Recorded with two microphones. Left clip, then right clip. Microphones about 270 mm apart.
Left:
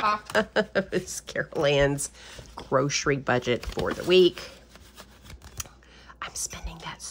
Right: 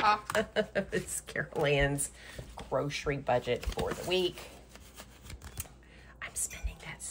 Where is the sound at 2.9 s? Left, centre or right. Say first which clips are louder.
Left 6 dB; left.